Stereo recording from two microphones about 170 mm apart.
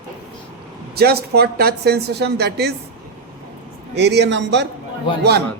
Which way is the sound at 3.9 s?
80° right.